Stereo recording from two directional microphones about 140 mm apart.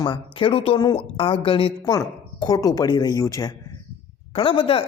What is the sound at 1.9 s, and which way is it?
A man's voice, 25° left (ahead or behind).